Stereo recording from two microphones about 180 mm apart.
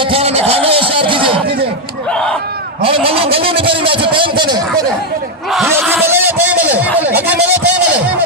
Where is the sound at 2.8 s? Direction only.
30° right (ahead or behind).